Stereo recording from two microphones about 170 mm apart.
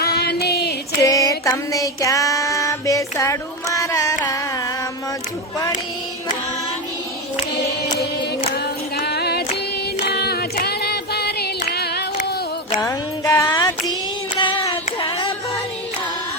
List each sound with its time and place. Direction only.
0.0 s female singing: 70° left (ahead or behind)
1.0 s a sound: 20° left (ahead or behind)
7.9 s music: 50° left (ahead or behind)
9.0 s female singing: 70° left (ahead or behind)
10.1 s singing: 70° left (ahead or behind)
12.8 s music: 20° left (ahead or behind)
14.3 s child singing: 25° left (ahead or behind)